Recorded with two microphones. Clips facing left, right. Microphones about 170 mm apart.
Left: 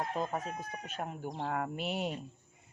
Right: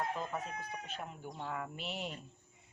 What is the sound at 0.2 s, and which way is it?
Speech, 40° left (ahead or behind).